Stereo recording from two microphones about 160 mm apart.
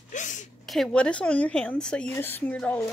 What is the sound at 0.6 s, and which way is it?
Speech, centre (ahead or behind).